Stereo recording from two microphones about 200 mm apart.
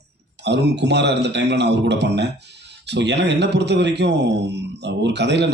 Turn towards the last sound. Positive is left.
turn(degrees=-60)  # may be behind; listen again after turning